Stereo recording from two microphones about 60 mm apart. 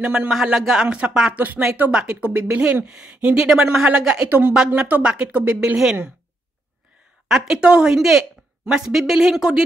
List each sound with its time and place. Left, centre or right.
0.0 s speech: centre
0.3 s a woman's voice: centre
7.2 s a woman's voice: centre